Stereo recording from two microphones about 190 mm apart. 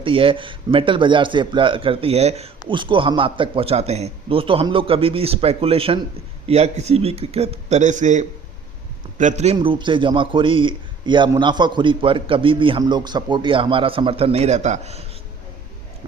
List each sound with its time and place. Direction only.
0.0 s a man's voice: 25° right (ahead or behind)
9.6 s a man's voice: 25° right (ahead or behind)